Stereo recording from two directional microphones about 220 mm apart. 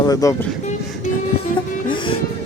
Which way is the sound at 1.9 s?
25° left (ahead or behind).